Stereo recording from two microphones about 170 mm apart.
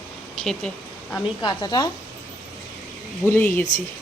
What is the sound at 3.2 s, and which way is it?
Speech, 10° left (ahead or behind).